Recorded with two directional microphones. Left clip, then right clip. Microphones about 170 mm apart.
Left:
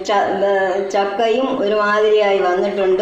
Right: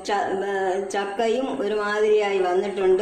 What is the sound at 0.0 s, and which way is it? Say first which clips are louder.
Speech: left 8 dB; 30° right (ahead or behind).